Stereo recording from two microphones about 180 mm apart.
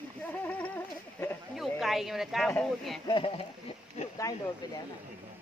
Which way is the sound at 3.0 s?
30° left (ahead or behind).